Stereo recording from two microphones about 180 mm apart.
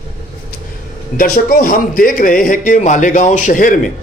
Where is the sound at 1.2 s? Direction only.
50° left (ahead or behind).